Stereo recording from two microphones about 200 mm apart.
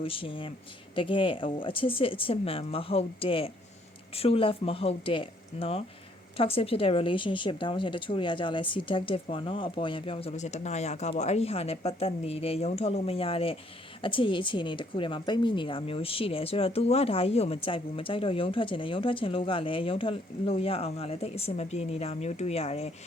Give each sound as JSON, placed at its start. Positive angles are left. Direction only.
{"t": 0.0, "sound": "a woman's voice", "side_deg": 25}